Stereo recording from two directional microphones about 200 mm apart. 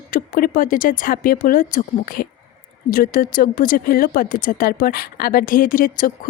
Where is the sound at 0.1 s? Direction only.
45° left (ahead or behind).